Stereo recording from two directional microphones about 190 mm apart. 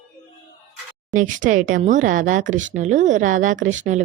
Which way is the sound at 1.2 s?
40° right (ahead or behind).